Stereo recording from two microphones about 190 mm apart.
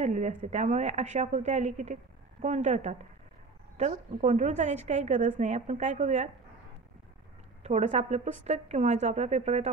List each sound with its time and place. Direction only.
0.0 s a woman's voice: 40° right (ahead or behind)
7.6 s a woman's voice: 35° right (ahead or behind)